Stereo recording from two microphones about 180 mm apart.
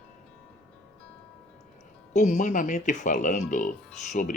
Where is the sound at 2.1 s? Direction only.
45° left (ahead or behind).